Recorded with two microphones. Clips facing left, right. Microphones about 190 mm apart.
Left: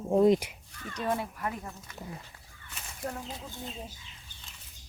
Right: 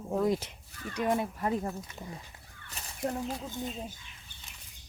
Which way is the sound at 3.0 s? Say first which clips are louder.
Right 5 dB; 20° right (ahead or behind).